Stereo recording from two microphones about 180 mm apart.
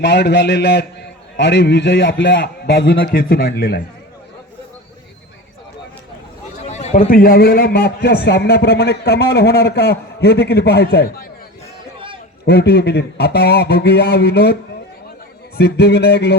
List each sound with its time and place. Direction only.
0.0 s a man's voice: 70° left (ahead or behind)
6.7 s a man's voice: 40° left (ahead or behind); by 11.3 s 60° left (ahead or behind)
11.9 s a sound: 30° right (ahead or behind)
12.5 s a man's voice: 65° left (ahead or behind)